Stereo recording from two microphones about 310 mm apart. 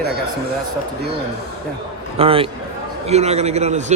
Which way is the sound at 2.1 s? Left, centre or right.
Centre.